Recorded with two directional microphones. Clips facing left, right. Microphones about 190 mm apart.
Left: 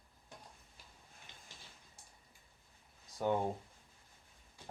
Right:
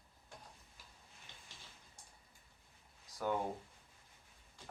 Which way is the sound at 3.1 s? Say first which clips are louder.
Left 4 dB; 25° left (ahead or behind).